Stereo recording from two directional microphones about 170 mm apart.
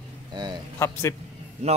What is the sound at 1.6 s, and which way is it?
Speech, 40° right (ahead or behind).